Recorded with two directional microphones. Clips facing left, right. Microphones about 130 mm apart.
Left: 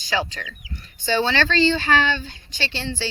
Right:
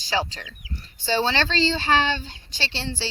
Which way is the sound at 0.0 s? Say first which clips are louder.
Left 1 dB; 35° right (ahead or behind).